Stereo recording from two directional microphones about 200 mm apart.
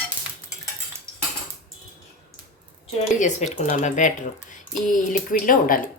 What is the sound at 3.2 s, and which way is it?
Speech, 35° left (ahead or behind).